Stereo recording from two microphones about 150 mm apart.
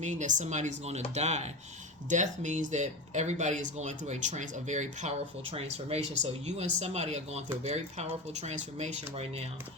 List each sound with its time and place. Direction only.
0.0 s speech: 55° right (ahead or behind)